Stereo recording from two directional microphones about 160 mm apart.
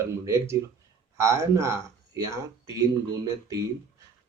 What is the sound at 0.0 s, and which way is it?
Speech, 15° right (ahead or behind).